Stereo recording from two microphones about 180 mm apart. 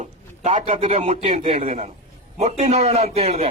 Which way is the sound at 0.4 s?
40° right (ahead or behind).